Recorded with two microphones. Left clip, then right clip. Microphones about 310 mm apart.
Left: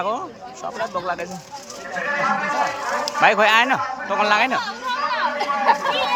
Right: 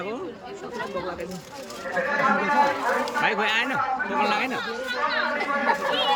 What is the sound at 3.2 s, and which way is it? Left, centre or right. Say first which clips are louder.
Speech: left 12 dB; centre.